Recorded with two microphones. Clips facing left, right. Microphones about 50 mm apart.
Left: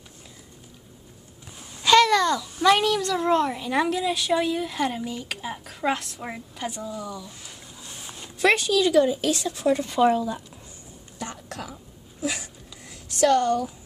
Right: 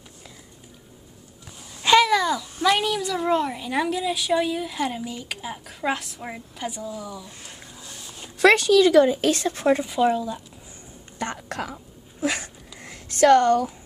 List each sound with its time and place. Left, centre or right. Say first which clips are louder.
1.9 s a child's voice: even; centre
8.4 s speech: right 5 dB; right
9.8 s a child's voice: left 1 dB; centre
11.1 s whispering: right 6 dB; right